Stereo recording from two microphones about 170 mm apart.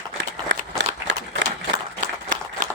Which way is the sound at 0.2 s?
90° right.